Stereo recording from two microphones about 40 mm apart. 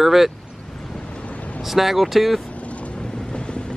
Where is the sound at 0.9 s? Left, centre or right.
Left.